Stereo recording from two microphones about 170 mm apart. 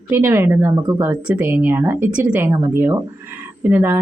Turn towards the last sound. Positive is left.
turn(degrees=-10)  # may be behind; listen again after turning